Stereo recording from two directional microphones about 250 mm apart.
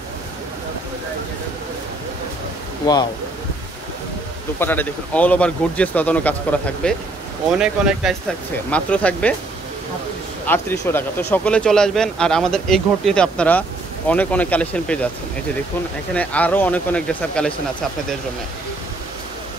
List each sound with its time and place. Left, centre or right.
2.8 s speech: centre
4.6 s speech: centre
10.4 s speech: centre
16.1 s speech: centre